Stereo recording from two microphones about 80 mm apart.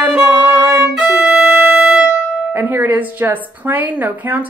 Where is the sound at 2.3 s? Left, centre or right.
Right.